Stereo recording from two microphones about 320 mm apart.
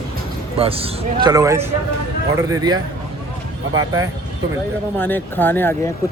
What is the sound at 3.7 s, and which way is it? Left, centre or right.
Speech, centre.